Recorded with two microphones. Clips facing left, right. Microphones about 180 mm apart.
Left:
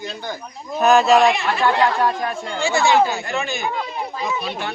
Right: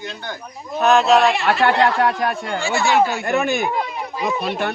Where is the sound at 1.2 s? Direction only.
15° left (ahead or behind).